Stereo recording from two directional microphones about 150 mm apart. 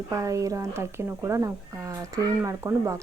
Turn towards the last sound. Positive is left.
turn(degrees=-20)  # may be behind; listen again after turning